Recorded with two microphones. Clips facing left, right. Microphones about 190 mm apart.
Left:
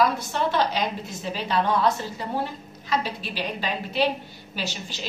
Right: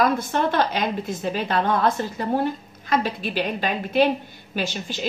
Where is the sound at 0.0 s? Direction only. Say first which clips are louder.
Right 2 dB; 50° right (ahead or behind).